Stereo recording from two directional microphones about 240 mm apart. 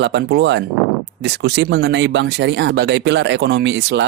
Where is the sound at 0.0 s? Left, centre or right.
Right.